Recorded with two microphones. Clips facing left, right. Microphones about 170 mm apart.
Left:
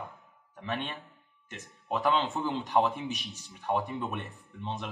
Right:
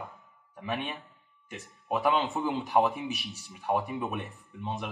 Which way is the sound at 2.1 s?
Centre (ahead or behind).